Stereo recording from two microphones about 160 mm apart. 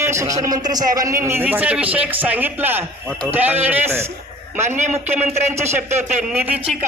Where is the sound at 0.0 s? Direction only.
15° right (ahead or behind).